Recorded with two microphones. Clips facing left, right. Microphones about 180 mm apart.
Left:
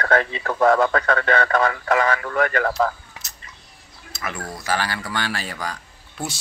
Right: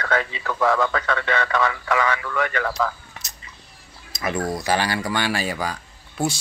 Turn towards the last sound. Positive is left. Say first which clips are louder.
# right 6 dB
turn(degrees=-5)  # may be behind; listen again after turning